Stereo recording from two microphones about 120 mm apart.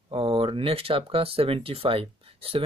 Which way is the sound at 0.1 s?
50° right (ahead or behind).